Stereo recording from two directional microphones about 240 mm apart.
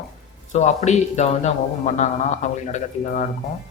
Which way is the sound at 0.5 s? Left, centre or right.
Left.